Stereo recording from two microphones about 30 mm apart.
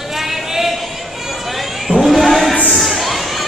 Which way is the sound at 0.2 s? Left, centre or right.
Centre.